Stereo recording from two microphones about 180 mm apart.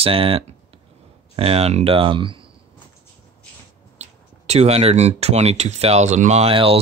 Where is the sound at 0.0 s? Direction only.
30° right (ahead or behind).